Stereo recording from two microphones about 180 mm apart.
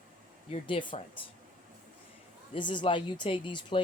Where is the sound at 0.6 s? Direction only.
25° left (ahead or behind).